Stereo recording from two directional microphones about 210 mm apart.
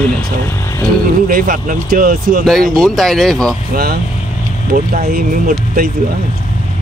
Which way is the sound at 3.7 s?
45° right (ahead or behind).